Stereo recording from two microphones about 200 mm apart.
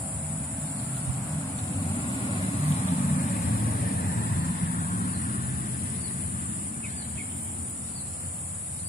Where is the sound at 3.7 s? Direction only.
50° left (ahead or behind).